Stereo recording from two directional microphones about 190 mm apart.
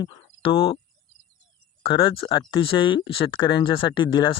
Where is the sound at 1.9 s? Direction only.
30° left (ahead or behind).